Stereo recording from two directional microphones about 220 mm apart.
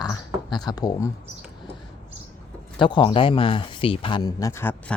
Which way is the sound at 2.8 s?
20° left (ahead or behind).